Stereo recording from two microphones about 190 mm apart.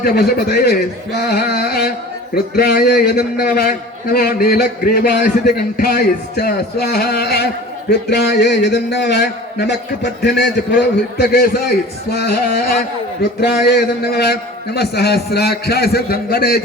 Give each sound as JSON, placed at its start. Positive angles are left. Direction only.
{"t": 0.0, "sound": "a man's voice", "side_deg": 55}